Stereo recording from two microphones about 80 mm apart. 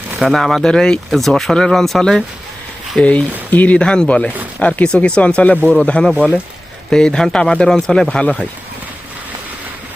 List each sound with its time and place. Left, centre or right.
0.2 s speech: centre